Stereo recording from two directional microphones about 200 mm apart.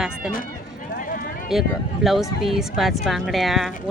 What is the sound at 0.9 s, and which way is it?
Run, 45° left (ahead or behind).